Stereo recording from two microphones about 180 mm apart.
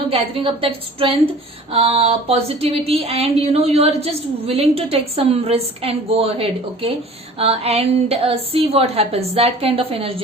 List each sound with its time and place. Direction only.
0.1 s speech: 30° right (ahead or behind)